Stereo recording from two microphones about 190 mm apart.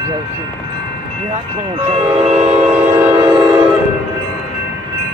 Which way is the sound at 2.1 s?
30° right (ahead or behind).